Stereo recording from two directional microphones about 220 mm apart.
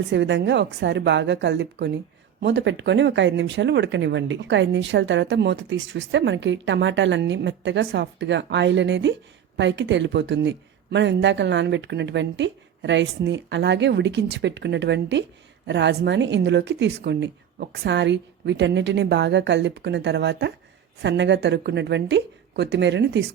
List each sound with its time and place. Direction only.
0.1 s speech: 50° right (ahead or behind)